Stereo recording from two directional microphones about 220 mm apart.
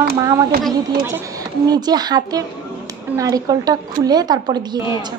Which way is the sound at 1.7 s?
20° right (ahead or behind).